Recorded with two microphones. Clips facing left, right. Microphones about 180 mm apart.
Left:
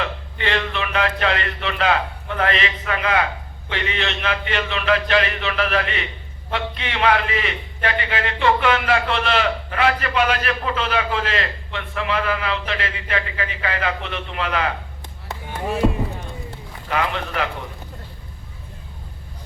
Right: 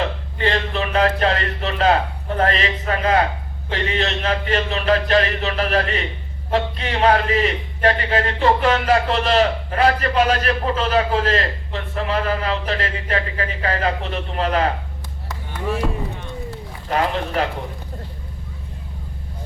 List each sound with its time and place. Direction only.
0.0 s a man's voice: 35° right (ahead or behind)
15.3 s run: 25° left (ahead or behind)
16.9 s a man's voice: 35° right (ahead or behind)